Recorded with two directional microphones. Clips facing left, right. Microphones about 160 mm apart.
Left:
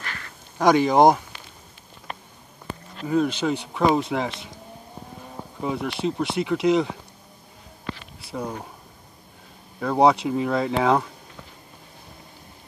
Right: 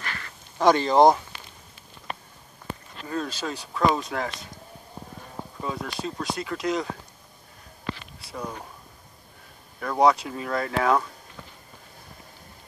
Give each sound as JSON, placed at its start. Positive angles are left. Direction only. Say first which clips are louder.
{"t": 0.6, "sound": "speech", "louder": "left 1 dB", "side_deg": 15}
{"t": 3.1, "sound": "speech", "louder": "left 8 dB", "side_deg": 20}
{"t": 5.6, "sound": "speech", "louder": "left 6 dB", "side_deg": 20}
{"t": 8.2, "sound": "speech", "louder": "left 4 dB", "side_deg": 25}
{"t": 9.8, "sound": "speech", "louder": "left 2 dB", "side_deg": 20}